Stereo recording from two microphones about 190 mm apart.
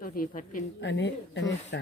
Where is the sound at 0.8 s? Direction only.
65° left (ahead or behind).